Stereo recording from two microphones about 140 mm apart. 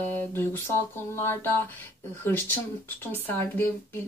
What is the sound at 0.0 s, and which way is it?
Speech, 15° left (ahead or behind).